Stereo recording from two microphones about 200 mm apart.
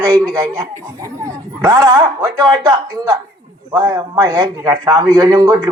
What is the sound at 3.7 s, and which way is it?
A man's voice, 20° right (ahead or behind).